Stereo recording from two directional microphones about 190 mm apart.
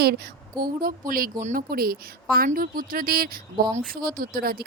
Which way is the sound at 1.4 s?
50° right (ahead or behind).